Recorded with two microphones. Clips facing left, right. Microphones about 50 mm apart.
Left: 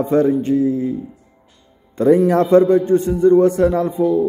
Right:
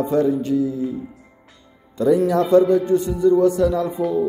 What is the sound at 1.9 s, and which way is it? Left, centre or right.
Speech, left.